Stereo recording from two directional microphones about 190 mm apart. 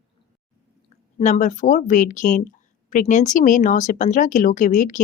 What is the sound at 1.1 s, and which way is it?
Speech, 40° left (ahead or behind).